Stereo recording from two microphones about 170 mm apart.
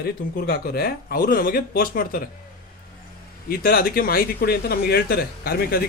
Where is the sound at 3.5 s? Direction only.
60° left (ahead or behind).